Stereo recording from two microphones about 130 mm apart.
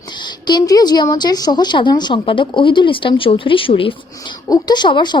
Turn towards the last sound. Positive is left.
turn(degrees=35)  # may be behind; listen again after turning